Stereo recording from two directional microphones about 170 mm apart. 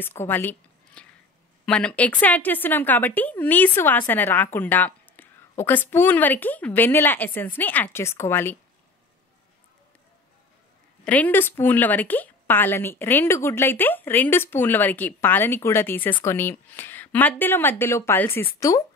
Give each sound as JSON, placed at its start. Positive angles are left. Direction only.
{"t": 0.0, "sound": "a woman's voice", "side_deg": 15}
{"t": 11.1, "sound": "a woman's voice", "side_deg": 10}